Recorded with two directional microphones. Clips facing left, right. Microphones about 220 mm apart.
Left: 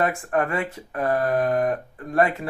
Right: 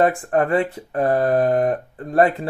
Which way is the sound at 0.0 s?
35° right (ahead or behind).